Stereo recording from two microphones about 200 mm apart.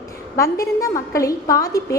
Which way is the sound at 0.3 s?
15° left (ahead or behind).